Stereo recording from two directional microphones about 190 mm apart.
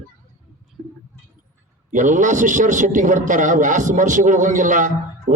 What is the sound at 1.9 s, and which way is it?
A man's voice, 40° right (ahead or behind).